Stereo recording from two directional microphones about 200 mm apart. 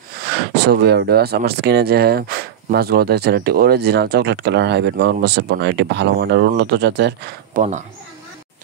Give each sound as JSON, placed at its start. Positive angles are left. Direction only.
{"t": 0.7, "sound": "speech", "side_deg": -55}